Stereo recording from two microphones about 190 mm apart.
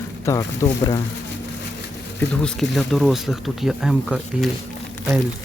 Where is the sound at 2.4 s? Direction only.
Centre (ahead or behind).